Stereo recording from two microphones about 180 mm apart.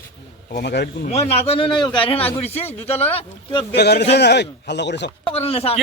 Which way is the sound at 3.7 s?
65° left (ahead or behind).